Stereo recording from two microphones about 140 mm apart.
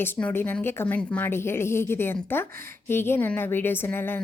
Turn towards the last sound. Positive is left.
turn(degrees=15)  # may be behind; listen again after turning